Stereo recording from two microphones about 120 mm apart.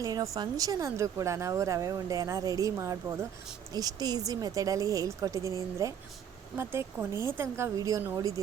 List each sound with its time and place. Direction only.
0.0 s a woman's voice: 30° right (ahead or behind)